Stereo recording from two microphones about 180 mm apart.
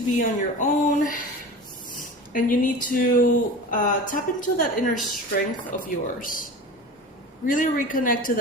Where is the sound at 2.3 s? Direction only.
50° left (ahead or behind).